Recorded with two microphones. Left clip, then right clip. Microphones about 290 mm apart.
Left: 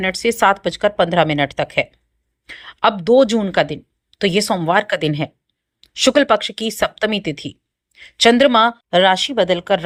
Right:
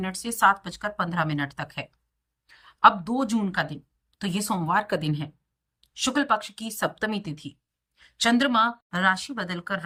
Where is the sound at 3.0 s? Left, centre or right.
Centre.